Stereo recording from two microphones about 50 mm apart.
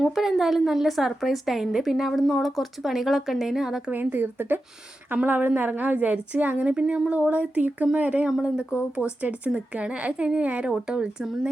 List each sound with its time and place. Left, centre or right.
0.1 s a woman's voice: centre
4.1 s speech: right
5.1 s a woman's voice: right
8.4 s speech: centre
9.0 s a woman's voice: right